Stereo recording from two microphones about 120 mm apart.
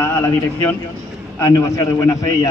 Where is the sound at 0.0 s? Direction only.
15° left (ahead or behind).